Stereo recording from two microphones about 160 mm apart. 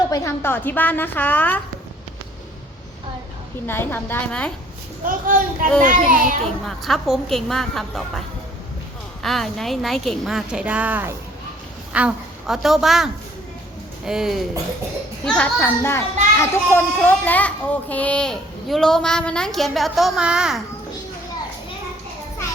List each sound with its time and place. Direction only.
0.1 s a woman's voice: 20° left (ahead or behind)
3.7 s a woman's voice: 15° left (ahead or behind)
5.0 s a child's voice: 60° right (ahead or behind)
6.4 s a child's voice: centre (ahead or behind)
9.2 s a child's voice: centre (ahead or behind)